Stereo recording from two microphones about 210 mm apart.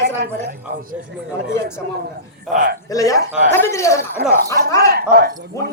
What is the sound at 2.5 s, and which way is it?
Speech, 40° right (ahead or behind).